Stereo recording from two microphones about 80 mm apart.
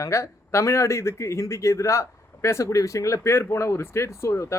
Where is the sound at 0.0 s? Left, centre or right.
Left.